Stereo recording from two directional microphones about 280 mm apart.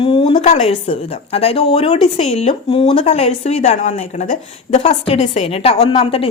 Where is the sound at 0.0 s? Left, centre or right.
Left.